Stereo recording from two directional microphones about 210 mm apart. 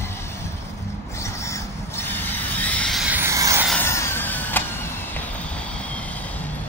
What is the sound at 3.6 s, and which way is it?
Vehicle, 10° left (ahead or behind).